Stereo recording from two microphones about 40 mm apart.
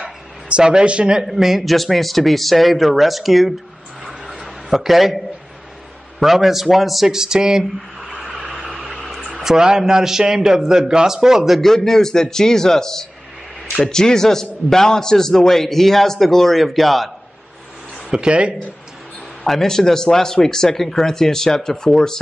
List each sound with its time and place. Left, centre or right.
0.0 s a sound: right
1.2 s speech: centre
4.6 s a man's voice: centre
7.2 s a man's voice: centre
8.1 s vehicle: centre
9.4 s a man's voice: centre
11.6 s a man's voice: centre
18.1 s speech: right
19.4 s a man's voice: centre